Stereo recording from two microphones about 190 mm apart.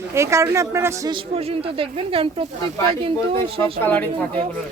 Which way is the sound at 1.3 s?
30° right (ahead or behind).